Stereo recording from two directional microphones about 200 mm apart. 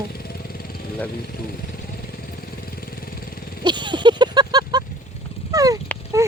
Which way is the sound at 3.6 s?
20° right (ahead or behind).